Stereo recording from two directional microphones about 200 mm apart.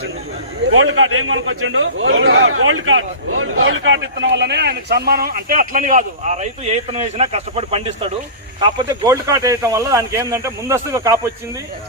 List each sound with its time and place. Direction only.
0.7 s a man's voice: 90° right; by 7.9 s 30° right (ahead or behind)
8.9 s speech: 15° right (ahead or behind)